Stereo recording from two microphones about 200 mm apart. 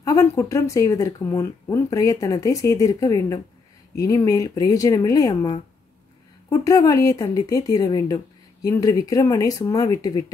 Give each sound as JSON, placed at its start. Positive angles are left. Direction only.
{"t": 0.0, "sound": "speech", "side_deg": 15}